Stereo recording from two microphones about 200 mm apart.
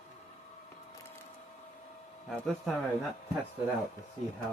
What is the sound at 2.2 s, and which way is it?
Speech, centre (ahead or behind).